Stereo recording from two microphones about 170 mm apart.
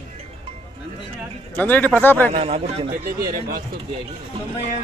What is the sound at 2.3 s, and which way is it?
Speech, 35° right (ahead or behind).